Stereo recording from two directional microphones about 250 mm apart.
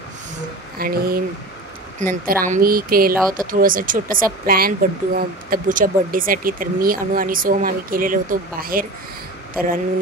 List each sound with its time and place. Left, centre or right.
0.7 s speech: right